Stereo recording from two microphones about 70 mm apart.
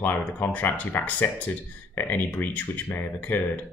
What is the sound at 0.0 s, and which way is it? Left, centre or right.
Speech, left.